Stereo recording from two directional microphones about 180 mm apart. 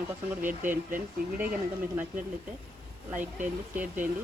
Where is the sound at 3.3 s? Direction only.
10° right (ahead or behind).